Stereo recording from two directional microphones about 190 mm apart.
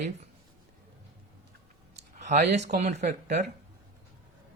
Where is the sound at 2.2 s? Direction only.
40° right (ahead or behind).